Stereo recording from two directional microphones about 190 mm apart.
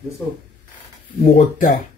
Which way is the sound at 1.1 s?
45° left (ahead or behind).